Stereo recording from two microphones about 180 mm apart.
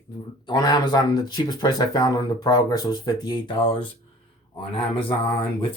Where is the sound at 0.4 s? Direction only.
25° left (ahead or behind).